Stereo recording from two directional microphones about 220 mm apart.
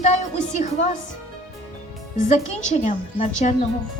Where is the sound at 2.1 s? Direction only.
35° left (ahead or behind).